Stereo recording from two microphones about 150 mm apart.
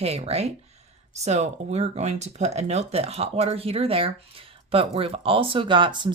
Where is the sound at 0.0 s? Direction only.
45° right (ahead or behind).